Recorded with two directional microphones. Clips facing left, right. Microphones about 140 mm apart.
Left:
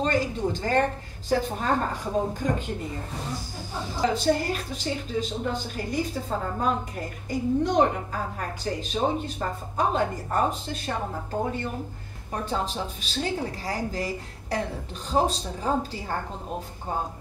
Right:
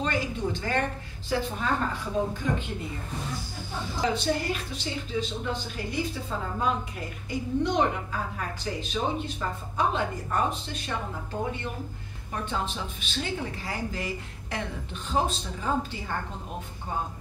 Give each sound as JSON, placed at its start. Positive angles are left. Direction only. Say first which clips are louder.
{"t": 0.0, "sound": "speech", "louder": "left 4 dB", "side_deg": 40}
{"t": 4.1, "sound": "speech", "louder": "left 4 dB", "side_deg": 40}
{"t": 12.4, "sound": "speech", "louder": "left 4 dB", "side_deg": 35}